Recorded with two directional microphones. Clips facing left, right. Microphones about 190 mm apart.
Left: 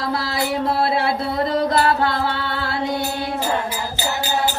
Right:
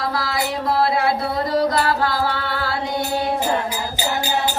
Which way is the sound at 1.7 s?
25° left (ahead or behind).